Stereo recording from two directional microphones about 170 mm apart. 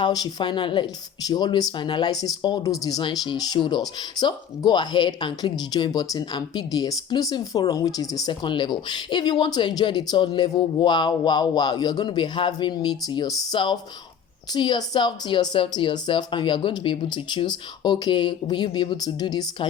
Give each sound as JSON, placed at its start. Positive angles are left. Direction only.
{"t": 0.0, "sound": "speech", "side_deg": 25}